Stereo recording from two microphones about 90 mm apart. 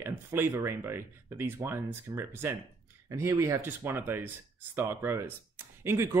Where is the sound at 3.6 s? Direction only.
25° right (ahead or behind).